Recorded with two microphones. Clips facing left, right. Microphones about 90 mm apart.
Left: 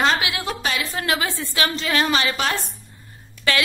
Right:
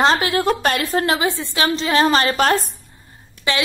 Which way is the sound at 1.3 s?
20° right (ahead or behind).